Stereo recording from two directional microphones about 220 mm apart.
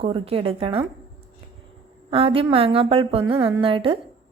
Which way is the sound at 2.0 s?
25° right (ahead or behind).